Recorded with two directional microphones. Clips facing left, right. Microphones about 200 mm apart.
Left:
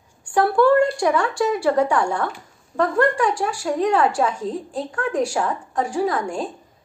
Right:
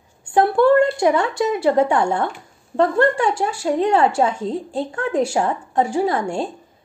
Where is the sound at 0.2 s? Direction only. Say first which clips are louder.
Right 2 dB; 25° right (ahead or behind).